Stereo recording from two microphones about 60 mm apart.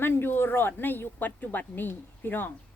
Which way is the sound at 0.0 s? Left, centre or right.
Left.